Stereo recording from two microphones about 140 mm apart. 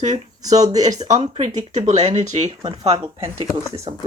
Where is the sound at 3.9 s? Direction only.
40° right (ahead or behind).